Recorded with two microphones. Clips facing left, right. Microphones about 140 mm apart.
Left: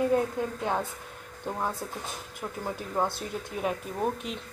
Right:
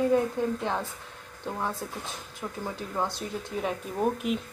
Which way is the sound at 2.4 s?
20° left (ahead or behind).